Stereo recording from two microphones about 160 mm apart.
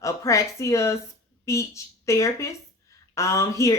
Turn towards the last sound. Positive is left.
turn(degrees=20)  # may be behind; listen again after turning